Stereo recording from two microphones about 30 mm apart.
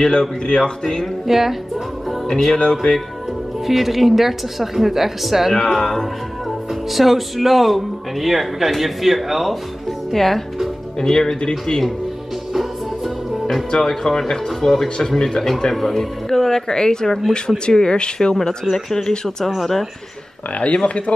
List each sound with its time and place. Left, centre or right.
0.0 s speech: left
1.2 s a woman's voice: centre
2.2 s speech: centre
3.6 s a woman's voice: centre
5.5 s speech: centre
6.7 s a woman's voice: centre
10.1 s speech: centre
11.0 s speech: centre
13.8 s speech: centre
15.7 s speech: centre; by 18.6 s left
18.7 s speech: centre
20.7 s speech: left